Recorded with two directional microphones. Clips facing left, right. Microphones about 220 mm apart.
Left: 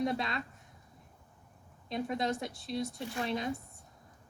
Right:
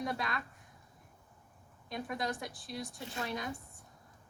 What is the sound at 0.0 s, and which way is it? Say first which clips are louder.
Speech: left 4 dB; 25° left (ahead or behind).